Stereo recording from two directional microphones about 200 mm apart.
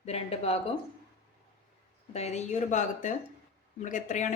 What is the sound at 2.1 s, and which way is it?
A woman's voice, 35° left (ahead or behind).